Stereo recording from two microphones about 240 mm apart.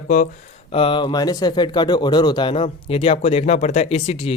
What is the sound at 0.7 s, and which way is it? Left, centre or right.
Speech, left.